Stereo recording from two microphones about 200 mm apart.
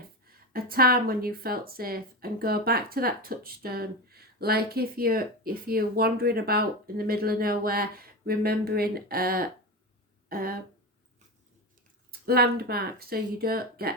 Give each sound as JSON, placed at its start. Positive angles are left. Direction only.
{"t": 0.3, "sound": "speech", "side_deg": -50}
{"t": 12.2, "sound": "speech", "side_deg": -50}